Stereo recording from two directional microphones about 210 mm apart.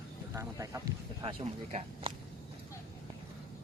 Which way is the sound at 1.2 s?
25° right (ahead or behind).